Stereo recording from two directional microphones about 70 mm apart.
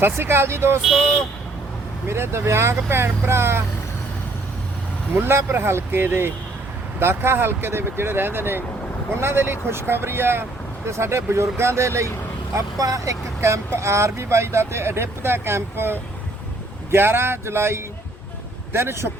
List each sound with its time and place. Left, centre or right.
0.0 s speech: right
0.8 s speech: centre
2.0 s speech: right
5.1 s speech: right
12.5 s speech: right